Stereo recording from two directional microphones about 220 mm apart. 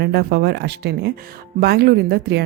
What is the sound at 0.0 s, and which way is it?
Speech, 45° right (ahead or behind).